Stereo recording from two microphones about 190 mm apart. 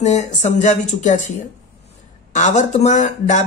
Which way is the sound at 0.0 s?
40° left (ahead or behind).